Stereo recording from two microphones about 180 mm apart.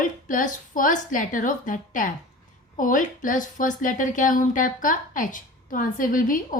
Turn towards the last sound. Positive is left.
turn(degrees=50)  # may be behind; listen again after turning